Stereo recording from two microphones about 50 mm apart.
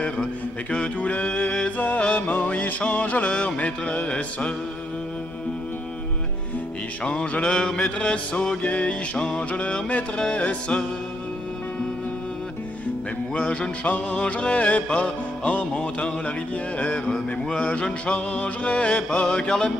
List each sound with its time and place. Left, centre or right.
0.7 s music: left
1.8 s music: left
7.0 s music: left
13.3 s music: left